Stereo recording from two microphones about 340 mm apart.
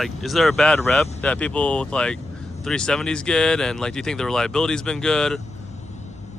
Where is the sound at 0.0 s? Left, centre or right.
Centre.